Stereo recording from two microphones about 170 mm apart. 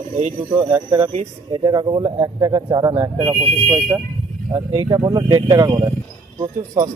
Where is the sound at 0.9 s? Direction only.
30° right (ahead or behind); by 4.0 s 10° right (ahead or behind).